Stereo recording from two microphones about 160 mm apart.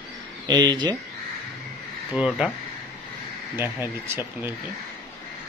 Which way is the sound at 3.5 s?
15° right (ahead or behind).